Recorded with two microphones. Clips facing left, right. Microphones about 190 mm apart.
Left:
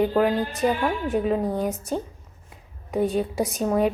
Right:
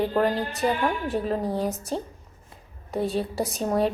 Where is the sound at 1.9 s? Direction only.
30° right (ahead or behind).